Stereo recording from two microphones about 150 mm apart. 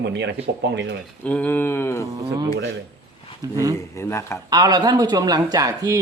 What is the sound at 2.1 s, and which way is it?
Speech, 25° right (ahead or behind).